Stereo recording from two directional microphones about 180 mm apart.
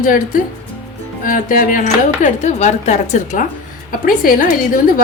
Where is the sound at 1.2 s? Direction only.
50° left (ahead or behind).